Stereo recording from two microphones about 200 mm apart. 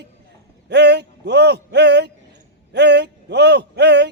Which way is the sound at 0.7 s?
55° right (ahead or behind).